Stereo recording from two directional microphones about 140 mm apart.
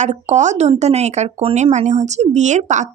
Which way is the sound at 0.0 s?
55° right (ahead or behind).